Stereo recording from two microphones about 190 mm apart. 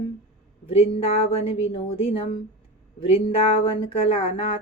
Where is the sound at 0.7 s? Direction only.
30° left (ahead or behind).